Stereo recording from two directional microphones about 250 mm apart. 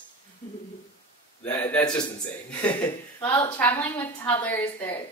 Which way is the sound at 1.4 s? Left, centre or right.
Centre.